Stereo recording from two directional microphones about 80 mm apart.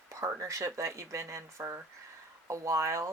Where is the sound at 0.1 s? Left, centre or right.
Right.